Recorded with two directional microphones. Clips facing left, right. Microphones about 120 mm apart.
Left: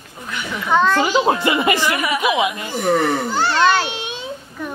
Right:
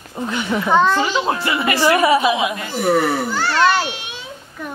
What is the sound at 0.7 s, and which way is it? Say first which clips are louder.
Speech: right 1 dB; 15° right (ahead or behind).